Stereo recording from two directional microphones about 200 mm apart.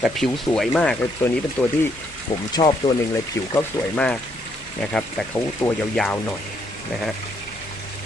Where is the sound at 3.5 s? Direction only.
10° left (ahead or behind).